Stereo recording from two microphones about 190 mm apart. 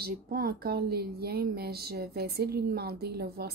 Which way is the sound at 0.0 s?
55° right (ahead or behind).